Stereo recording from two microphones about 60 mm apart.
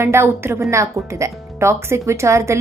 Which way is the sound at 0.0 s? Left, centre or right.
Right.